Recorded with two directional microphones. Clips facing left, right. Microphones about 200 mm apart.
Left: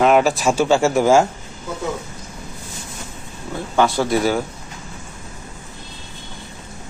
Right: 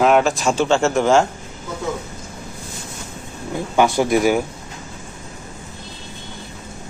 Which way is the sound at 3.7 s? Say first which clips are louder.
Right 1 dB; 15° right (ahead or behind).